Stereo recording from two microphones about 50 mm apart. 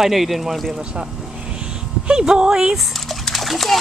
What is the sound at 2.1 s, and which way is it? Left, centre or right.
Speech, centre.